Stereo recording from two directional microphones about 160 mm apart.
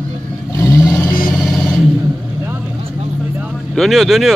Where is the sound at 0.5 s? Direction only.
20° left (ahead or behind).